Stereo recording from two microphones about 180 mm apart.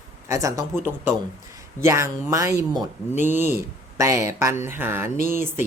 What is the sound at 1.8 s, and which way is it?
Speech, 15° right (ahead or behind).